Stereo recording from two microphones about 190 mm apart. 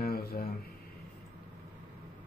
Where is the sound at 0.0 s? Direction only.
55° left (ahead or behind).